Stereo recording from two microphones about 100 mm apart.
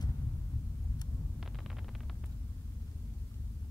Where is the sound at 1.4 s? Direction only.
Centre (ahead or behind).